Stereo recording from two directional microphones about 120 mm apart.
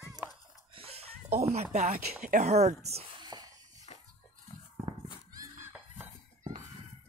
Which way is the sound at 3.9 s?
70° left (ahead or behind).